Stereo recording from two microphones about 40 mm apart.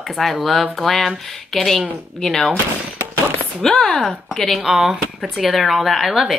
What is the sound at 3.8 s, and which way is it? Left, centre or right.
Speech, left.